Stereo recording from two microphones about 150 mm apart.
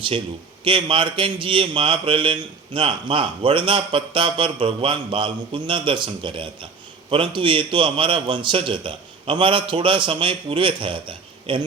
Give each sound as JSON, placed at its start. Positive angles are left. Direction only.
{"t": 0.6, "sound": "a man's voice", "side_deg": -35}